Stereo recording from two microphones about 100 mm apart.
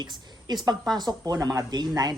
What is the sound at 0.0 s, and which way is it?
Speech, 45° right (ahead or behind).